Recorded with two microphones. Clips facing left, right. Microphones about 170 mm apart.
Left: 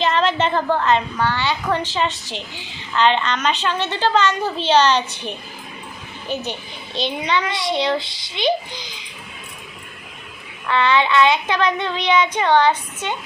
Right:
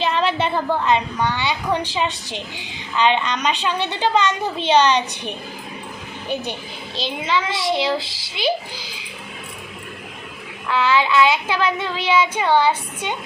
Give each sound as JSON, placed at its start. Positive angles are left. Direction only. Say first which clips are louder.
{"t": 0.0, "sound": "a woman's voice", "louder": "left 2 dB", "side_deg": -10}
{"t": 6.9, "sound": "child singing", "louder": "left 1 dB", "side_deg": 0}
{"t": 10.7, "sound": "child singing", "louder": "left 1 dB", "side_deg": -5}